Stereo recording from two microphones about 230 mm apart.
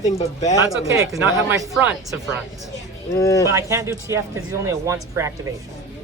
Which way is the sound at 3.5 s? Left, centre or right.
Centre.